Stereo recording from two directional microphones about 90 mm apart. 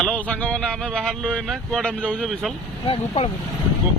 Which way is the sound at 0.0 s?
10° left (ahead or behind).